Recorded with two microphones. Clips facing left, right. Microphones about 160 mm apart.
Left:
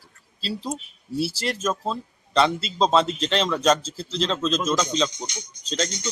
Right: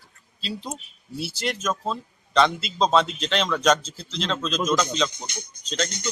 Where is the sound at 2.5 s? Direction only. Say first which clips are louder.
Left 4 dB; 30° left (ahead or behind).